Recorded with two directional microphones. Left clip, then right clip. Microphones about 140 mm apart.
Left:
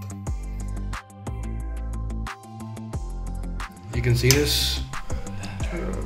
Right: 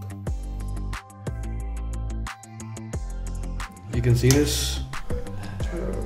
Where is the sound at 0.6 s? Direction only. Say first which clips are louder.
Left 1 dB; centre (ahead or behind).